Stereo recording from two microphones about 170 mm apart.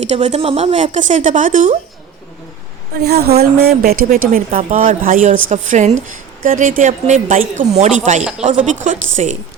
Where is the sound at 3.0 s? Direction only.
65° right (ahead or behind).